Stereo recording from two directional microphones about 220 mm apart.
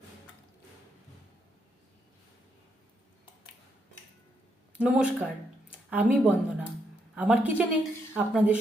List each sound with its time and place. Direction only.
4.8 s speech: 5° right (ahead or behind)